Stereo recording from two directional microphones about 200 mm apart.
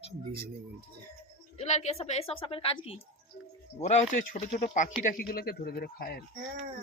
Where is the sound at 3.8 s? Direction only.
35° left (ahead or behind).